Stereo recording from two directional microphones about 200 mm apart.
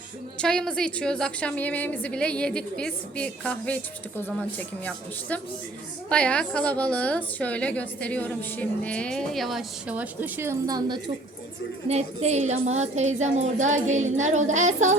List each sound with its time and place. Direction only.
0.3 s a woman's voice: 5° left (ahead or behind); by 11.0 s 20° right (ahead or behind)
11.9 s a woman's voice: 35° right (ahead or behind)